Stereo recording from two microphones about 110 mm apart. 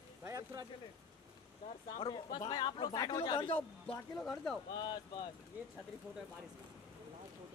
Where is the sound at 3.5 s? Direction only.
15° left (ahead or behind).